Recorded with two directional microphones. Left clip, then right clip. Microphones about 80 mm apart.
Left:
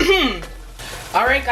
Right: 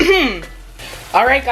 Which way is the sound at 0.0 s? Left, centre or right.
Right.